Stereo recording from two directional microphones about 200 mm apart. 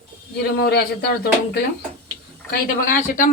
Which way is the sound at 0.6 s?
50° left (ahead or behind).